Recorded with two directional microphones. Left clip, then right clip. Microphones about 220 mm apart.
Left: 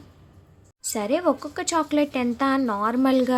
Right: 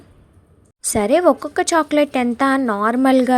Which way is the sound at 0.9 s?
30° right (ahead or behind).